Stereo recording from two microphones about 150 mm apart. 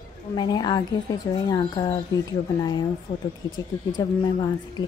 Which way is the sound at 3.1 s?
35° left (ahead or behind).